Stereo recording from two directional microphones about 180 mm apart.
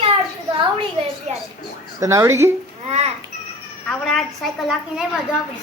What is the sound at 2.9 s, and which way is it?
Babbling, 35° right (ahead or behind).